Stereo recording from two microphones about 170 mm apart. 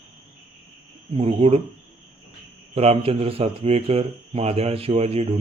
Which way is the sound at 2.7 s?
35° right (ahead or behind).